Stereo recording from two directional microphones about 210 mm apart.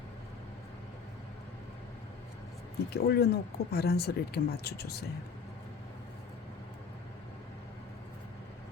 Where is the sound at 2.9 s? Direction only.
50° left (ahead or behind).